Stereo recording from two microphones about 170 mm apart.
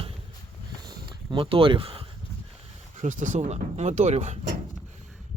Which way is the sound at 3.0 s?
45° right (ahead or behind).